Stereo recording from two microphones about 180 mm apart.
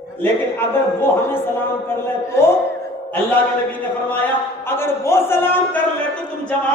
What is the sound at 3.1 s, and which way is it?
A man's voice, 10° left (ahead or behind).